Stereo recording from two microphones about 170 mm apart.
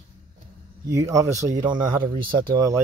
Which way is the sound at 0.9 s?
15° right (ahead or behind).